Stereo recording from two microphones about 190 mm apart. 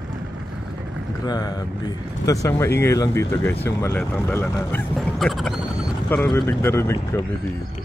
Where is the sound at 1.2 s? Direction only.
20° left (ahead or behind).